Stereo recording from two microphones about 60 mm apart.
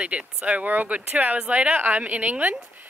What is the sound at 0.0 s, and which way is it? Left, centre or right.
Speech, centre.